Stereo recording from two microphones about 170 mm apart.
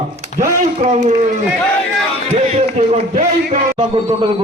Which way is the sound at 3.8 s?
30° right (ahead or behind).